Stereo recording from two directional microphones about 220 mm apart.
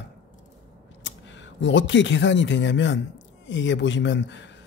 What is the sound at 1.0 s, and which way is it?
A man's voice, 55° left (ahead or behind).